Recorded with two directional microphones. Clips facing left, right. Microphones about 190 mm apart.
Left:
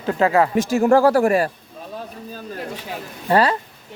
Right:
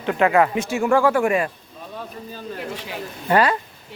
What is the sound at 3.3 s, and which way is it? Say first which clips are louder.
Speech: left 1 dB; 35° left (ahead or behind).